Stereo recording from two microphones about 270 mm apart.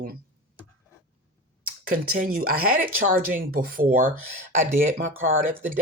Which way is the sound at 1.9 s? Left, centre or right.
Right.